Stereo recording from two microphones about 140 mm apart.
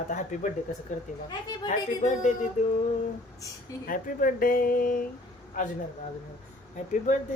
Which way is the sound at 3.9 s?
75° left (ahead or behind).